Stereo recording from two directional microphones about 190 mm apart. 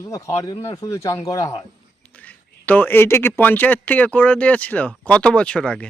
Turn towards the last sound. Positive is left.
turn(degrees=5)  # may be behind; listen again after turning